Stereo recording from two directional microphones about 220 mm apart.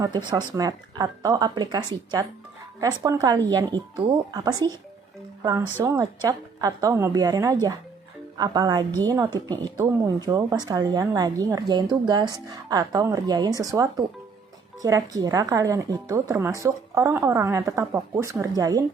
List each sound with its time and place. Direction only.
0.0 s speech: 20° right (ahead or behind)